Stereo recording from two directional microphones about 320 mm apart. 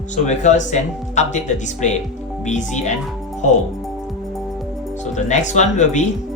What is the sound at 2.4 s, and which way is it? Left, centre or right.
Speech, left.